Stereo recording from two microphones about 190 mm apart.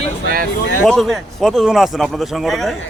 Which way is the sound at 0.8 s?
Centre (ahead or behind).